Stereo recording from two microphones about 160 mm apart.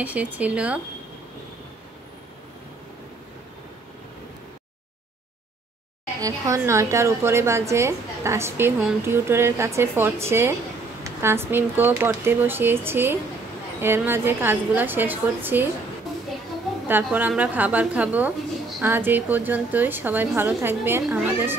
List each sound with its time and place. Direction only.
0.0 s a woman's voice: 10° right (ahead or behind)
6.2 s a woman's voice: 20° right (ahead or behind)
16.8 s a woman's voice: 10° right (ahead or behind)